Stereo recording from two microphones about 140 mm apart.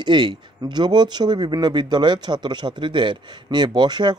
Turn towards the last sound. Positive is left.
turn(degrees=-30)  # may be behind; listen again after turning